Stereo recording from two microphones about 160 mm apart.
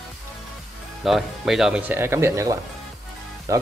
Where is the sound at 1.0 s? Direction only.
Centre (ahead or behind).